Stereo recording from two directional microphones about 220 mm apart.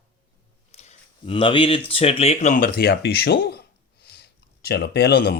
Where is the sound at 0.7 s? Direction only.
30° left (ahead or behind).